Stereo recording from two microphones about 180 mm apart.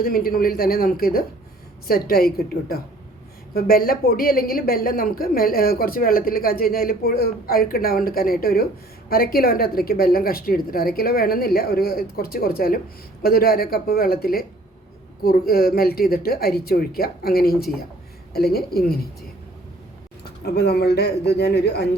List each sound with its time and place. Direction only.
0.0 s a woman's voice: 55° left (ahead or behind)
20.4 s a woman's voice: 65° left (ahead or behind)